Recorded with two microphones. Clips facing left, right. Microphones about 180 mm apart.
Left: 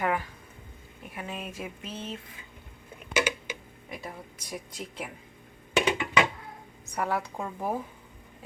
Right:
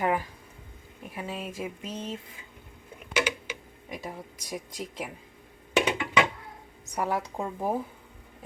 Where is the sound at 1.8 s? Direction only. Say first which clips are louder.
Right 2 dB; 40° right (ahead or behind).